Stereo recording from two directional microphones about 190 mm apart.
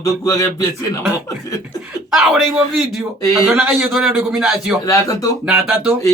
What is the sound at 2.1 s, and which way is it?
Speech, 5° right (ahead or behind).